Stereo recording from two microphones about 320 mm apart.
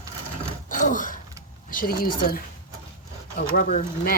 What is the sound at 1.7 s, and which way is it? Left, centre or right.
Speech, left.